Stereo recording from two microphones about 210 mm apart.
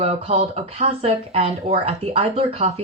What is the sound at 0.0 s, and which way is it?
Speech, 30° right (ahead or behind).